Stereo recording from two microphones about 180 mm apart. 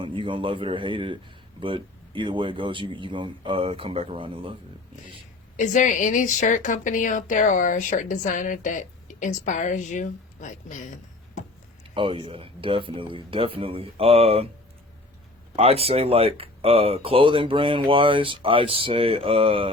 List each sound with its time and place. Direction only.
0.0 s a man's voice: 30° right (ahead or behind)
5.5 s speech: 45° left (ahead or behind)
11.9 s speech: 30° right (ahead or behind)
15.5 s speech: 35° right (ahead or behind)